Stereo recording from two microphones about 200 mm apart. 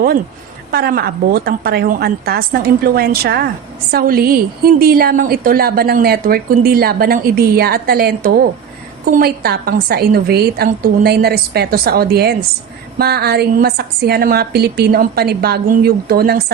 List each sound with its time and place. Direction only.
0.7 s a woman's voice: 50° right (ahead or behind)